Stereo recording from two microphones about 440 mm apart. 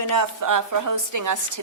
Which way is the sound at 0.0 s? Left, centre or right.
Right.